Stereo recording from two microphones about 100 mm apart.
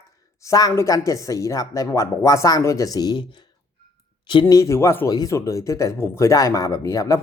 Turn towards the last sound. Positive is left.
turn(degrees=35)  # may be behind; listen again after turning